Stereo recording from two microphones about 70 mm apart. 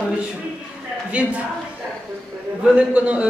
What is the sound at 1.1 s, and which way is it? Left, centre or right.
Speech, centre.